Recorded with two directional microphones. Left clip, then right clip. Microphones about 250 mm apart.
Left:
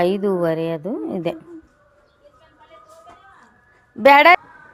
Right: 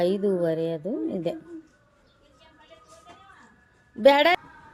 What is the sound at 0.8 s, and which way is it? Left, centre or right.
Speech, left.